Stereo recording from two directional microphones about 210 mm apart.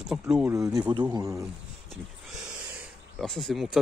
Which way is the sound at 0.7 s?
20° right (ahead or behind).